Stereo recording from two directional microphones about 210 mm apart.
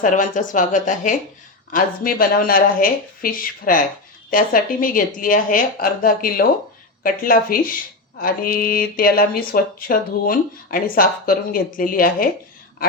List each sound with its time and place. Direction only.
0.0 s a woman's voice: 40° left (ahead or behind)